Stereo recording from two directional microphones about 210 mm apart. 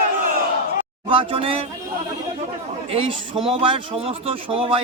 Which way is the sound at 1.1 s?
25° right (ahead or behind).